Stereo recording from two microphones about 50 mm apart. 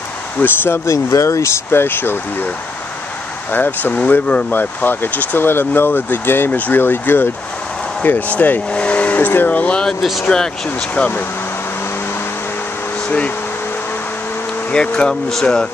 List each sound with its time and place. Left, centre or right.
0.4 s speech: left
0.8 s speech: left
3.5 s speech: left
4.5 s speech: left
6.5 s speech: left
6.8 s speech: left
8.0 s speech: left
8.6 s vehicle: left
9.5 s speech: left
10.3 s speech: centre
14.7 s speech: centre